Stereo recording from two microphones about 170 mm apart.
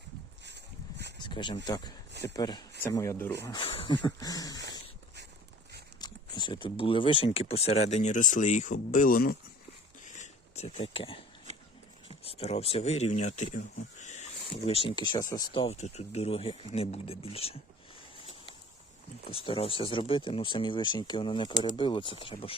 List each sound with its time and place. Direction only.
0.4 s a sound: 85° right
1.2 s a sound: 25° left (ahead or behind)
1.6 s speech: 25° left (ahead or behind)
3.4 s speech: 30° left (ahead or behind)
4.0 s speech: 20° left (ahead or behind)
6.0 s speech: 25° left (ahead or behind); by 9.4 s 60° left (ahead or behind)
10.0 s a sound: 45° left (ahead or behind)
12.0 s speech: 35° left (ahead or behind)
14.0 s a sound: 45° left (ahead or behind)
14.7 s speech: 35° left (ahead or behind)
15.6 s speech: 40° left (ahead or behind)
19.3 s speech: 30° left (ahead or behind)